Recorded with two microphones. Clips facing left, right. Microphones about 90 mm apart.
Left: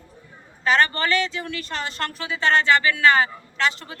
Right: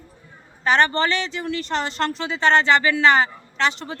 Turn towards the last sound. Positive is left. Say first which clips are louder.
# right 2 dB
turn(degrees=-30)  # may be behind; listen again after turning